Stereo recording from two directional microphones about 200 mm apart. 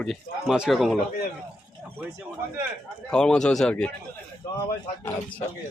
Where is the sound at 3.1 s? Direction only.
5° left (ahead or behind).